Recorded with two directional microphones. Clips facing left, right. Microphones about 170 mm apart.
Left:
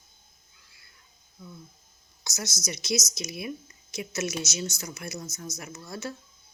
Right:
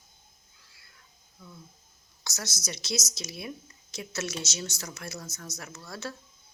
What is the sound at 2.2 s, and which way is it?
Speech, 15° left (ahead or behind).